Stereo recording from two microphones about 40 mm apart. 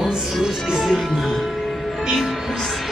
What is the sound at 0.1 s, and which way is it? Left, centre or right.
Speech, centre.